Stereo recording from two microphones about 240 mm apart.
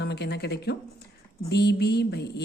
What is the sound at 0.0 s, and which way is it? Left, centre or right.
A woman's voice, left.